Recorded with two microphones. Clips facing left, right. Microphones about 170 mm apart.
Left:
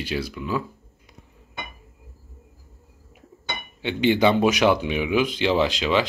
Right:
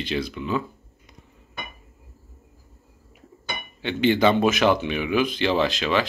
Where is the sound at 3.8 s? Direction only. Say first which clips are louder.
Even; 15° left (ahead or behind).